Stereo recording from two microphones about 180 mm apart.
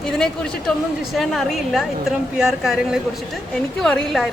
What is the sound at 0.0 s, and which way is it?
A woman's voice, 5° left (ahead or behind).